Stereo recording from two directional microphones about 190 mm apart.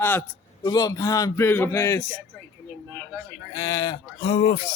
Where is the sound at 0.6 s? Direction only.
20° left (ahead or behind).